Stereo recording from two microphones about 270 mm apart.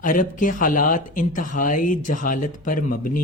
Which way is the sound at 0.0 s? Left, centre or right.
Left.